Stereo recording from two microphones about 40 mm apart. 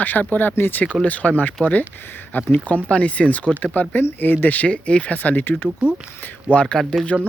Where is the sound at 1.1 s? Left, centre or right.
Left.